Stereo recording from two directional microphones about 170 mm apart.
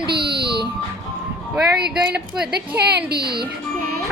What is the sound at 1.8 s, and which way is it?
Speech, 70° right (ahead or behind).